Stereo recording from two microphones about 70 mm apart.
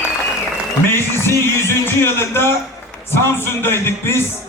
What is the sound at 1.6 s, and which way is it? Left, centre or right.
A man's voice, left.